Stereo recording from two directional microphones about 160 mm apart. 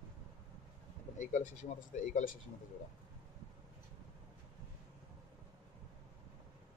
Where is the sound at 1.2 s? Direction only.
50° left (ahead or behind).